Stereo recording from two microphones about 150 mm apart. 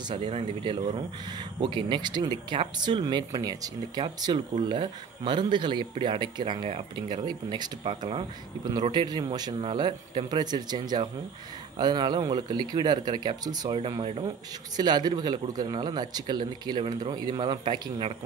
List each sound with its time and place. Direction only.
0.1 s speech: 40° right (ahead or behind)